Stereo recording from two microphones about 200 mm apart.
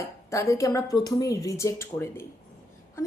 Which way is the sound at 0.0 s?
15° left (ahead or behind).